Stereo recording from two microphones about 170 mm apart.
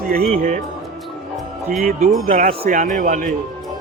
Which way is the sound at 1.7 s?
55° right (ahead or behind).